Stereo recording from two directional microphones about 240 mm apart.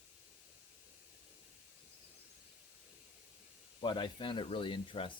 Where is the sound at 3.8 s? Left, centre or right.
Centre.